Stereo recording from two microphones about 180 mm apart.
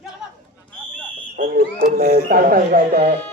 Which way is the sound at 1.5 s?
55° right (ahead or behind).